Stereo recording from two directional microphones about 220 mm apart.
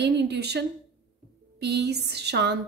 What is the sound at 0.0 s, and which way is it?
A woman's voice, 50° right (ahead or behind).